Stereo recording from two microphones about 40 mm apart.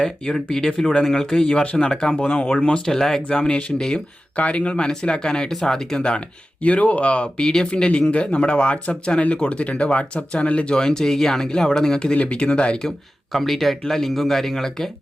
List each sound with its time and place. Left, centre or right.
0.4 s speech: centre
2.2 s speech: left
2.6 s speech: left
2.8 s speech: centre
3.2 s speech: left
4.4 s speech: left
4.9 s speech: centre
6.0 s speech: left
7.4 s speech: centre
10.8 s speech: centre
12.1 s speech: left
13.3 s speech: centre